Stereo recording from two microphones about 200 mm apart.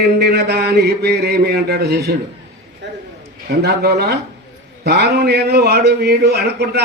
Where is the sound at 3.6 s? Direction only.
55° right (ahead or behind).